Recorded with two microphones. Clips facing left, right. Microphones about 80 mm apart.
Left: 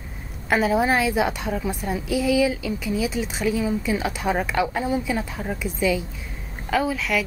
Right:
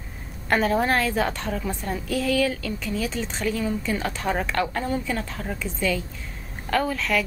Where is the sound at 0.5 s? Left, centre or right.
Centre.